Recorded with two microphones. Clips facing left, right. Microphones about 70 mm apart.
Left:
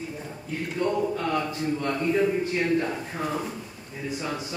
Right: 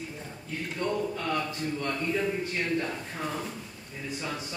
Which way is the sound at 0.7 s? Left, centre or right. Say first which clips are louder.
Left 5 dB; centre.